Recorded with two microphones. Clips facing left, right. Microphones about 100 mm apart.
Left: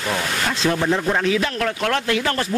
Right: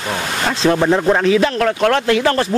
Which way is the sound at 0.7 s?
55° right (ahead or behind).